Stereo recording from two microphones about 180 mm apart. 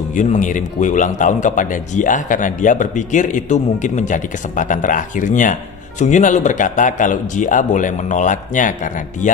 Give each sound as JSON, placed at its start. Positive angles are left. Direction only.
{"t": 0.1, "sound": "speech", "side_deg": 45}